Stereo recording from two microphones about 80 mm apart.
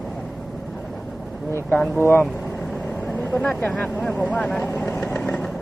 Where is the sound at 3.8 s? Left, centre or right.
Centre.